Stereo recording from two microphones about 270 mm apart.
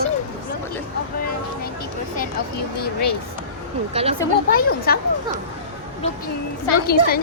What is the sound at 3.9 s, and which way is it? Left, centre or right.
Speech, right.